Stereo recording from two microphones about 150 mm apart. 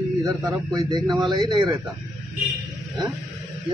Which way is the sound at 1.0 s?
Centre (ahead or behind).